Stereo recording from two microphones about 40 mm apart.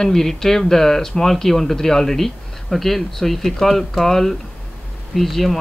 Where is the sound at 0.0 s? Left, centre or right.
Centre.